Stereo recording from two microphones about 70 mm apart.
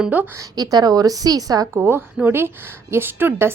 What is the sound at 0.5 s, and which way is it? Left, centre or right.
A woman's voice, right.